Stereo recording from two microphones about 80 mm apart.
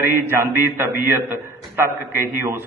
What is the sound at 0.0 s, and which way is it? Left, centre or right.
A man's voice, right.